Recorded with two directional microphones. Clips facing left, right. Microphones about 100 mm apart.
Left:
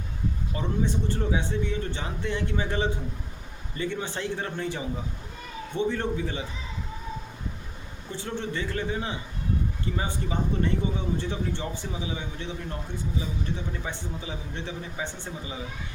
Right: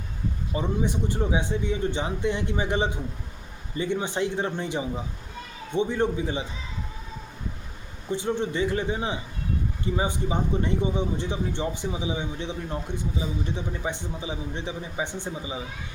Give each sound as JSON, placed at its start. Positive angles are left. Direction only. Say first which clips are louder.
{"t": 0.5, "sound": "speech", "louder": "right 2 dB", "side_deg": -15}
{"t": 8.1, "sound": "speech", "louder": "right 6 dB", "side_deg": -15}